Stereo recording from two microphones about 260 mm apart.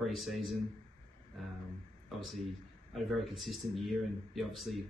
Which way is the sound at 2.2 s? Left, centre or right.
Centre.